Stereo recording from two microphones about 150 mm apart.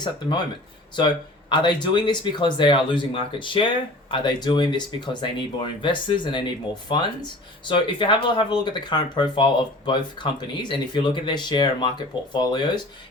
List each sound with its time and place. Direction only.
0.9 s speech: 30° left (ahead or behind)